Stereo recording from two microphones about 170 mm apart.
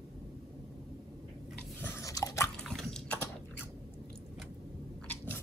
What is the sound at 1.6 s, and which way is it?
Biting, 10° left (ahead or behind).